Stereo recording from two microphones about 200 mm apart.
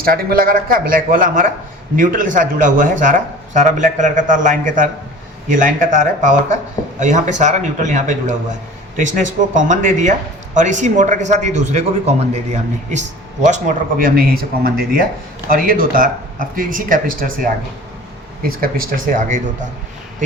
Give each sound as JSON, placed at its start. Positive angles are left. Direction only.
{"t": 0.0, "sound": "speech", "side_deg": -50}